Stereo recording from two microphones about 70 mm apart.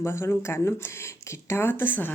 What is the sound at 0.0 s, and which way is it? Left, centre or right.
A woman's voice, left.